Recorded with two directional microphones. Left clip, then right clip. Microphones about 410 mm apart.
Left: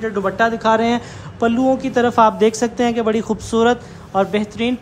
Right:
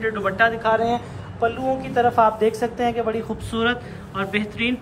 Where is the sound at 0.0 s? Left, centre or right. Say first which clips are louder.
Left 2 dB; centre.